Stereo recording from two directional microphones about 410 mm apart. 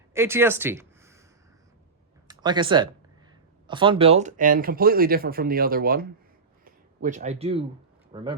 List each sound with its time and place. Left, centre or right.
0.1 s speech: centre
2.2 s speech: centre